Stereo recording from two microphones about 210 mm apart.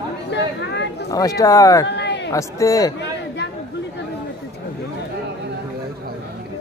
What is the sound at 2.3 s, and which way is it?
Speech, 15° left (ahead or behind).